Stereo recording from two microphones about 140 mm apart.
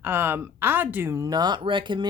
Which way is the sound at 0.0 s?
15° right (ahead or behind).